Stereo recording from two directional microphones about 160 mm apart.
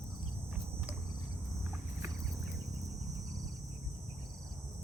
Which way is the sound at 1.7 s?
15° right (ahead or behind).